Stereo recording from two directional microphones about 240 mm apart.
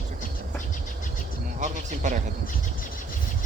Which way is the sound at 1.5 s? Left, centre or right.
Right.